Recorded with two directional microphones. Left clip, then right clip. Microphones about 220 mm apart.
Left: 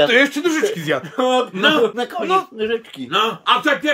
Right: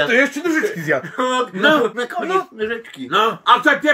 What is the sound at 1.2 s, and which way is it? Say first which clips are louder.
A man's voice: left 1 dB; 45° left (ahead or behind).